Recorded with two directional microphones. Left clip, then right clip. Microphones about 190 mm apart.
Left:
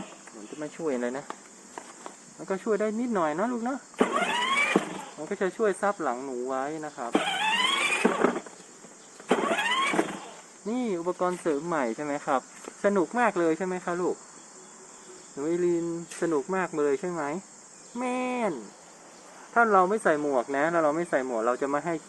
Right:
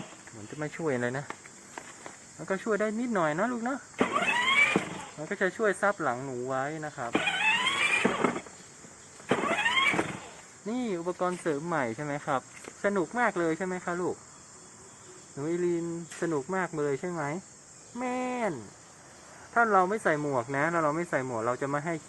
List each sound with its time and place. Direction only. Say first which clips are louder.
0.6 s speech: even; 20° right (ahead or behind)
2.5 s speech: left 2 dB; 10° right (ahead or behind)
3.9 s vehicle: left 3 dB; 20° left (ahead or behind)
4.3 s a sound: right 1 dB; 15° left (ahead or behind)
5.3 s speech: left 1 dB; 10° right (ahead or behind)
7.1 s a sound: even; 20° left (ahead or behind)
9.4 s vehicle: right 1 dB; 10° left (ahead or behind)
10.7 s speech: left 3 dB; 5° right (ahead or behind)
15.4 s speech: left 3 dB; centre (ahead or behind)
19.5 s speech: left 3 dB; centre (ahead or behind)